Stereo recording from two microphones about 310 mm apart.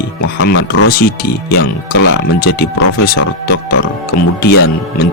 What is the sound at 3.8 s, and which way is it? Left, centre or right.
Speech, left.